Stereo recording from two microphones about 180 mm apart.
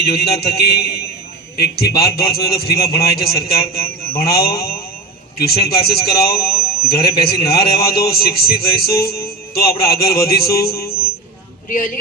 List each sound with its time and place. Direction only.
0.2 s a man's voice: 65° left (ahead or behind)